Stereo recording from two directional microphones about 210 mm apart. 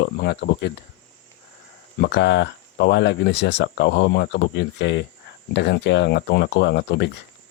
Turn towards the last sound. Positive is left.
turn(degrees=55)  # may be behind; listen again after turning